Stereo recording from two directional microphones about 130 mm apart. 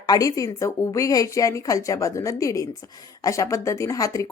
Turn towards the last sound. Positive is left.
turn(degrees=25)  # may be behind; listen again after turning